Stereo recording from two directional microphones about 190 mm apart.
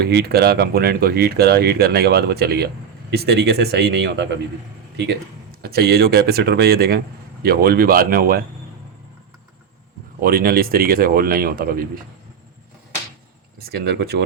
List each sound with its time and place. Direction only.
0.0 s speech: 55° right (ahead or behind)
5.6 s speech: 55° right (ahead or behind)
10.2 s speech: 50° right (ahead or behind)
13.7 s speech: 55° right (ahead or behind)